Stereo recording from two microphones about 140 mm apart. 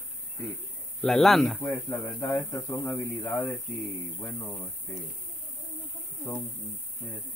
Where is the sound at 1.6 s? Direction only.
15° left (ahead or behind).